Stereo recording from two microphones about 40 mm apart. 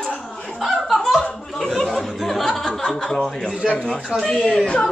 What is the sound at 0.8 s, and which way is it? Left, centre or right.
Dog, centre.